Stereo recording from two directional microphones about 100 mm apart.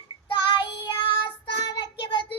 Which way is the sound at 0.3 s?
55° left (ahead or behind).